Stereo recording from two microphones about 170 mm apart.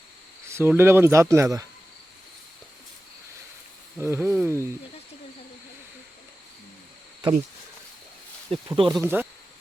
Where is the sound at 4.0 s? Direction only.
15° right (ahead or behind).